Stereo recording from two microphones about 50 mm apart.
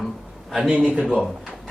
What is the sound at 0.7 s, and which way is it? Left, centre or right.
Speech, right.